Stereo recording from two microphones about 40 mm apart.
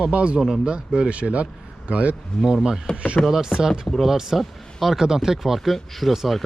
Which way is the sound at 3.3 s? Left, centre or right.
Centre.